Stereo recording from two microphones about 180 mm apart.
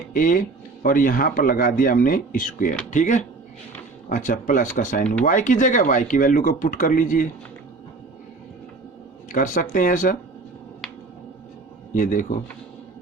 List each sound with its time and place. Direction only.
0.1 s a man's voice: 50° left (ahead or behind)
9.3 s a man's voice: 45° left (ahead or behind)
11.9 s a man's voice: 50° left (ahead or behind)